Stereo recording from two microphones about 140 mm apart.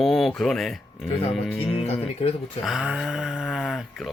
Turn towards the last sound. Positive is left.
turn(degrees=0)  # may be behind; listen again after turning